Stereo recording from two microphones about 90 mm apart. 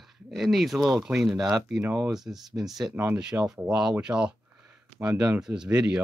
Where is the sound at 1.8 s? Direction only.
20° right (ahead or behind).